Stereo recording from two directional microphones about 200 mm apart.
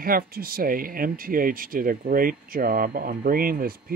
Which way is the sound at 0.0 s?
45° right (ahead or behind).